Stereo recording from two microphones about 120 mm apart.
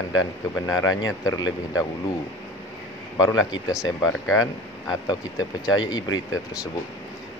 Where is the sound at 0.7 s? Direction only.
30° left (ahead or behind).